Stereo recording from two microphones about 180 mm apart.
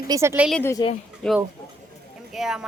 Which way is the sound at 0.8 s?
25° left (ahead or behind).